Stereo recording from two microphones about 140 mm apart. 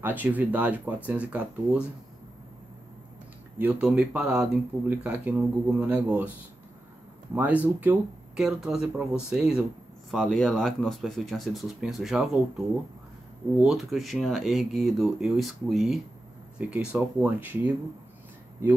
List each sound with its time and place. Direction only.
0.0 s speech: 10° right (ahead or behind)
3.5 s speech: 10° right (ahead or behind)
7.3 s speech: 10° right (ahead or behind)